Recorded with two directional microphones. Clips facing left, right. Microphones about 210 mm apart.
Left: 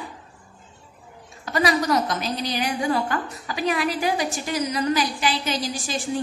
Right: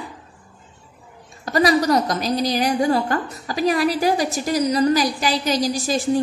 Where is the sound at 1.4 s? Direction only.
40° right (ahead or behind).